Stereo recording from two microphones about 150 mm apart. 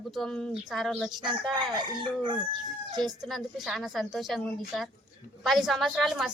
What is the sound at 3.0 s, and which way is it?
Speech, centre (ahead or behind).